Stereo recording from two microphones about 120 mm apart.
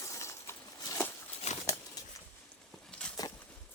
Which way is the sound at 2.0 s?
30° left (ahead or behind).